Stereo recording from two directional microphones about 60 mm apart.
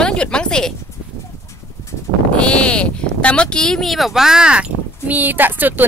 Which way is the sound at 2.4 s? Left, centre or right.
Centre.